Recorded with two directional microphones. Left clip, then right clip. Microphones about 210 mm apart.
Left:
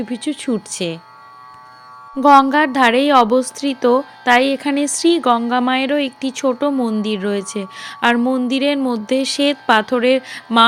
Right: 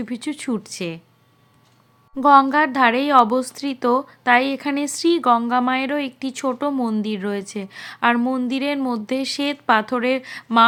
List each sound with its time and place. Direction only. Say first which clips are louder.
0.0 s a woman's voice: left 5 dB; 15° left (ahead or behind)
2.2 s a woman's voice: left 3 dB; 15° left (ahead or behind)